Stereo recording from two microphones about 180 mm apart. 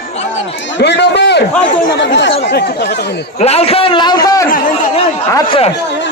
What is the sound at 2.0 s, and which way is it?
Chatter, 75° left (ahead or behind).